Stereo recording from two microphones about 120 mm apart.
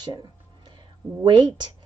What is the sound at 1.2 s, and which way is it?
Speech, 40° right (ahead or behind).